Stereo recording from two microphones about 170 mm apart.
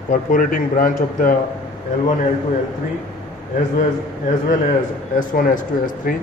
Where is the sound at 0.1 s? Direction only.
50° left (ahead or behind).